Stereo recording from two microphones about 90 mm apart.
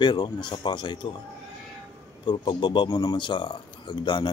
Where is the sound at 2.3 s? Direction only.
55° left (ahead or behind).